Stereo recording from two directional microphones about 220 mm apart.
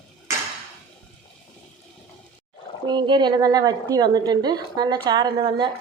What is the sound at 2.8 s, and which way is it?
A woman's voice, 20° right (ahead or behind).